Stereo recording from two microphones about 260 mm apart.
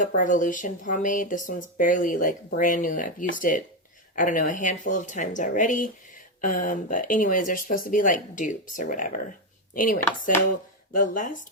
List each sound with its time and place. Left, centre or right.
0.0 s speech: left